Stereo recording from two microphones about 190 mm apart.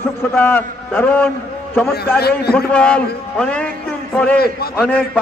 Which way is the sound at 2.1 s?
55° left (ahead or behind).